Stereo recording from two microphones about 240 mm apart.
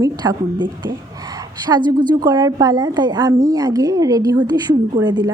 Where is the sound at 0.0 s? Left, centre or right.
Centre.